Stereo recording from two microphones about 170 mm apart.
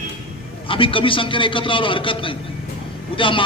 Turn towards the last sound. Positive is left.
turn(degrees=30)  # may be behind; listen again after turning